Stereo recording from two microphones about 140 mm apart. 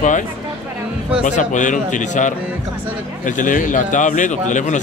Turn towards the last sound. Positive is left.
turn(degrees=60)  # may be behind; listen again after turning